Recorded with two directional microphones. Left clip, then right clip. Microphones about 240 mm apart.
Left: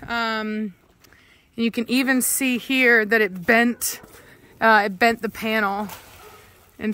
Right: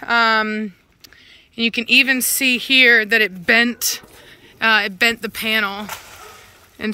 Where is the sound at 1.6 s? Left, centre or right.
Left.